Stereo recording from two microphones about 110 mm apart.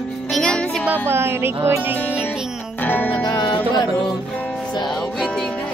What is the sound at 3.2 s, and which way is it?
Music, 40° left (ahead or behind).